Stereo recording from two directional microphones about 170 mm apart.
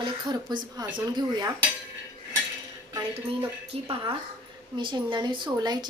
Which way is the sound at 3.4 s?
30° right (ahead or behind).